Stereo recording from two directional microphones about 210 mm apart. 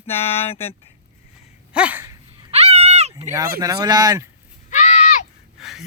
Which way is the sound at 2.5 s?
30° right (ahead or behind).